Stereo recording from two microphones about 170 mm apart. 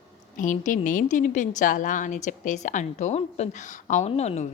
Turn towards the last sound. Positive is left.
turn(degrees=40)  # may be behind; listen again after turning